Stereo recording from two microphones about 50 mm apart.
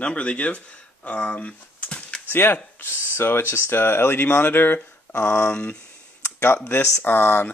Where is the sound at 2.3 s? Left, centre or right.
Left.